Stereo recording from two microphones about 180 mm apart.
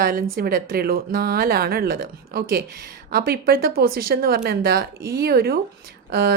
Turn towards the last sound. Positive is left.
turn(degrees=-60)  # may be behind; listen again after turning